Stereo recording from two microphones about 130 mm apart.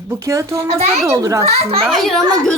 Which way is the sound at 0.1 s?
25° right (ahead or behind).